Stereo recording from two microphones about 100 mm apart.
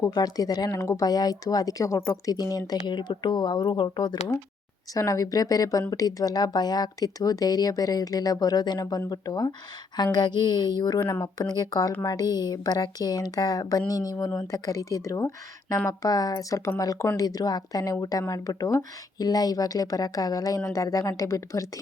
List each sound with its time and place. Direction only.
0.0 s speech: 40° left (ahead or behind)
4.9 s a woman's voice: 35° left (ahead or behind)